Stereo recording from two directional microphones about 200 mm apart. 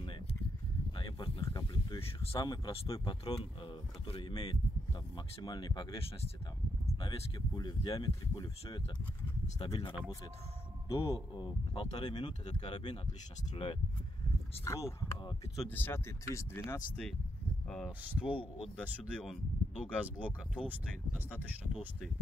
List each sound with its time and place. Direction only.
0.0 s a sound: 25° left (ahead or behind)
0.9 s speech: 25° left (ahead or behind)
10.9 s speech: 15° left (ahead or behind); by 13.7 s 30° left (ahead or behind)
14.6 s speech: 15° left (ahead or behind)
17.6 s speech: centre (ahead or behind)
18.3 s speech: 25° left (ahead or behind)
18.8 s speech: 5° left (ahead or behind)